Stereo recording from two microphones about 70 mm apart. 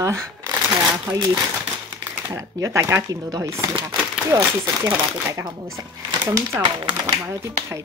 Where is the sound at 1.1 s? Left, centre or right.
Right.